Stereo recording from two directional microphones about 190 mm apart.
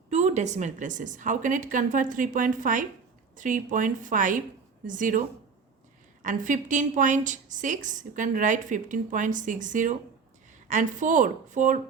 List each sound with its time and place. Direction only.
0.1 s a woman's voice: 35° right (ahead or behind)
6.2 s a woman's voice: 40° right (ahead or behind)